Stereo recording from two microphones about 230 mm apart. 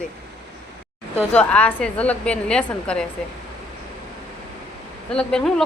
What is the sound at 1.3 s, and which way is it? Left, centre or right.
A woman's voice, centre.